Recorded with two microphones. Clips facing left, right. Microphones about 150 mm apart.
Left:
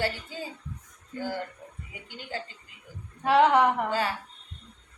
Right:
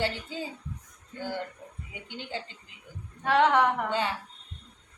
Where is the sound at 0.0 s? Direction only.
20° right (ahead or behind).